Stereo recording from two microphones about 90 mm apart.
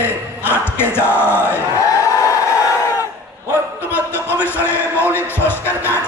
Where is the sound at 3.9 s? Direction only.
25° left (ahead or behind).